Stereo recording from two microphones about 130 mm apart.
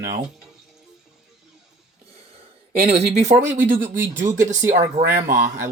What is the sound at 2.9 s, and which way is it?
Speech, 65° right (ahead or behind).